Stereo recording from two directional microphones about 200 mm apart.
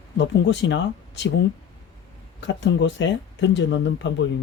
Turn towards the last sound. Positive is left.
turn(degrees=65)  # may be behind; listen again after turning